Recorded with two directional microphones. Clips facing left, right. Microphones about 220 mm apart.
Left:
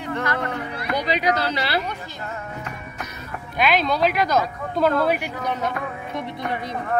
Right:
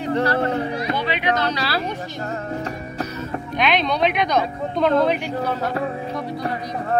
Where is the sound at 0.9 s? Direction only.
40° left (ahead or behind).